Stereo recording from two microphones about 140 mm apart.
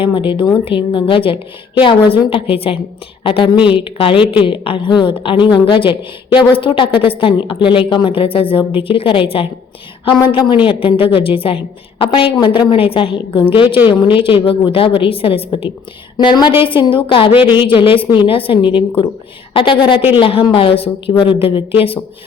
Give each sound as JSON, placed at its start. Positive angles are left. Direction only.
{"t": 0.1, "sound": "a woman's voice", "side_deg": 35}
{"t": 16.1, "sound": "a woman's voice", "side_deg": 30}